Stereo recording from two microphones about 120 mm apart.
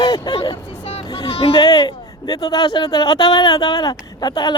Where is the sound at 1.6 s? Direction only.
35° left (ahead or behind).